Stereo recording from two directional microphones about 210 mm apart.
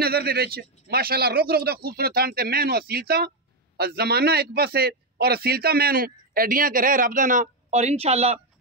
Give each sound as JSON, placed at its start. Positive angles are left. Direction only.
{"t": 0.0, "sound": "a man's voice", "side_deg": -45}